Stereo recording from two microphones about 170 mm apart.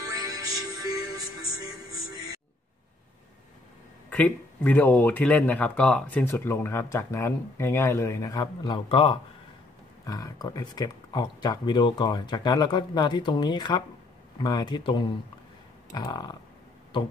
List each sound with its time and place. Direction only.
0.1 s music: 20° right (ahead or behind)
4.1 s speech: 10° left (ahead or behind)